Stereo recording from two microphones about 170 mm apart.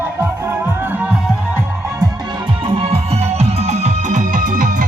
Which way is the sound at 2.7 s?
35° right (ahead or behind).